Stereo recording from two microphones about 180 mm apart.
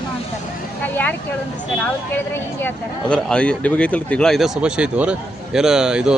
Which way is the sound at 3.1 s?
5° left (ahead or behind).